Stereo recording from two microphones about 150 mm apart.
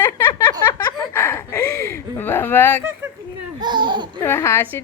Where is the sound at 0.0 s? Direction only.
15° left (ahead or behind).